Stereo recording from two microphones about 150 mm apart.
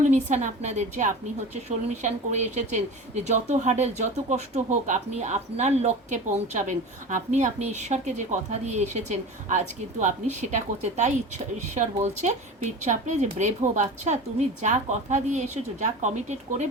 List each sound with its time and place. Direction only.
0.0 s speech: 50° right (ahead or behind)